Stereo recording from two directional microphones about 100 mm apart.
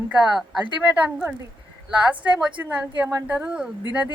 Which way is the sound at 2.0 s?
15° right (ahead or behind).